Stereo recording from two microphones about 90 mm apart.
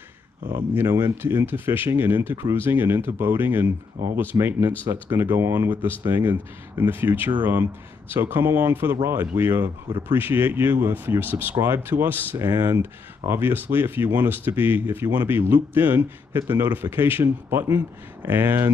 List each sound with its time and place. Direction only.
1.0 s speech: 25° right (ahead or behind)